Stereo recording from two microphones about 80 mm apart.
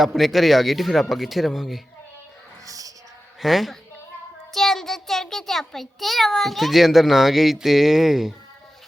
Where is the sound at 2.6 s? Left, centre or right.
Right.